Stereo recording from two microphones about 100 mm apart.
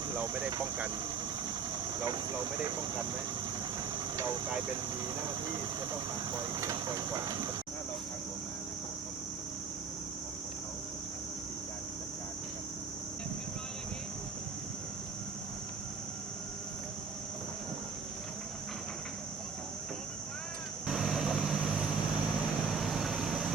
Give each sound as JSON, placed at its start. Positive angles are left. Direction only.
{"t": 0.2, "sound": "speech", "side_deg": -20}
{"t": 6.5, "sound": "speech", "side_deg": -40}
{"t": 20.8, "sound": "vehicle", "side_deg": -5}
{"t": 22.7, "sound": "vehicle", "side_deg": 0}